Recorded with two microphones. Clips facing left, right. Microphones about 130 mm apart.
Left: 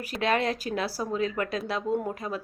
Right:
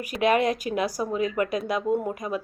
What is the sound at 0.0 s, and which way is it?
Speech, 15° right (ahead or behind).